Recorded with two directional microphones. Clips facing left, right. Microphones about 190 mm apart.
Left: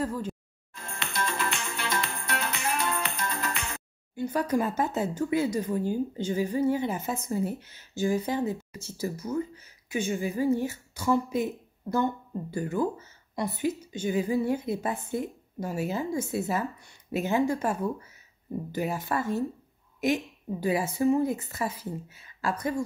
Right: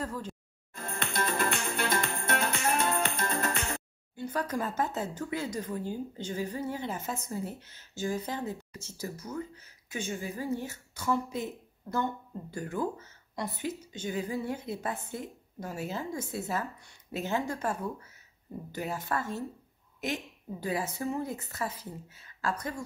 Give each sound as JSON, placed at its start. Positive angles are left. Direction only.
{"t": 0.0, "sound": "speech", "side_deg": 10}
{"t": 0.7, "sound": "music", "side_deg": -45}
{"t": 4.1, "sound": "a woman's voice", "side_deg": 15}